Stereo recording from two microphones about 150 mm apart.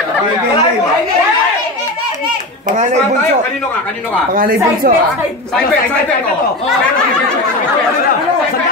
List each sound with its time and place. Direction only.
4.3 s speech: 70° right (ahead or behind)